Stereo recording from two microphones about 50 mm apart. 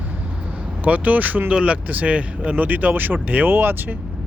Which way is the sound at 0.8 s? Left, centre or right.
Right.